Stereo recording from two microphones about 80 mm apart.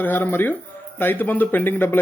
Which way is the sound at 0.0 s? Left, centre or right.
Left.